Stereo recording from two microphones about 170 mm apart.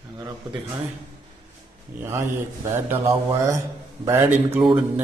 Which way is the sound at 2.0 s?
15° right (ahead or behind).